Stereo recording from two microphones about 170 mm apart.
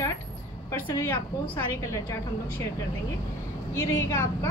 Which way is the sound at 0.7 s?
15° left (ahead or behind).